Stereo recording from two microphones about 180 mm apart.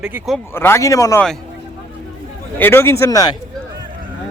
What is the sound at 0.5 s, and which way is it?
Speech, 15° left (ahead or behind).